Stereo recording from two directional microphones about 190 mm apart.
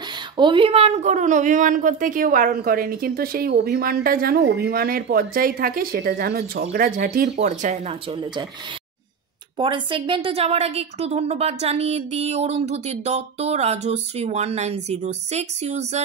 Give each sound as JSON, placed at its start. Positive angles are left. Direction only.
{"t": 0.4, "sound": "a woman's voice", "side_deg": -25}
{"t": 7.3, "sound": "a woman's voice", "side_deg": -40}
{"t": 8.1, "sound": "speech", "side_deg": -25}
{"t": 9.6, "sound": "a woman's voice", "side_deg": -25}